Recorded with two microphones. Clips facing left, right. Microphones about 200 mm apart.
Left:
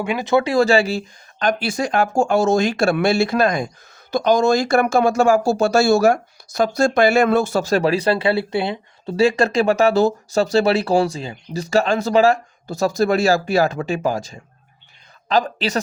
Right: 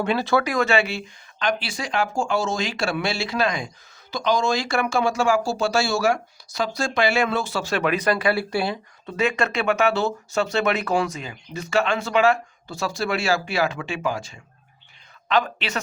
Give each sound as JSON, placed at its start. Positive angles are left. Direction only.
{"t": 0.0, "sound": "speech", "side_deg": 15}